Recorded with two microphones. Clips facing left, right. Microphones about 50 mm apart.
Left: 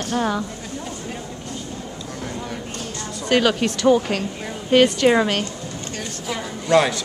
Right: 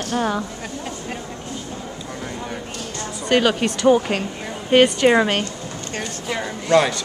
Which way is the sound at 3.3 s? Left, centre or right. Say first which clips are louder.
Even; centre.